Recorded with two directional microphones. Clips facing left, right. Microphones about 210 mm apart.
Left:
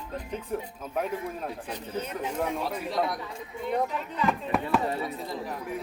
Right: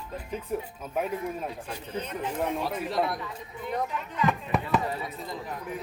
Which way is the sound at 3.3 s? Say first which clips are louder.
Left 3 dB; 25° left (ahead or behind).